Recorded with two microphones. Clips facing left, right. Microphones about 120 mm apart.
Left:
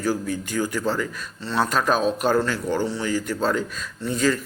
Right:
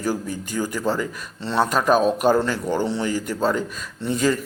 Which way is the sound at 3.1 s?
15° right (ahead or behind).